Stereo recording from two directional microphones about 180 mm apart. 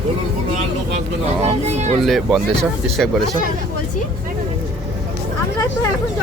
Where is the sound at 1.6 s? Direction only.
40° right (ahead or behind).